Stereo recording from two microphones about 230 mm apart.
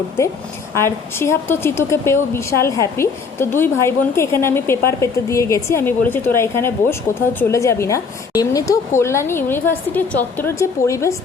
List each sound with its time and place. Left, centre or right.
0.2 s a woman's voice: centre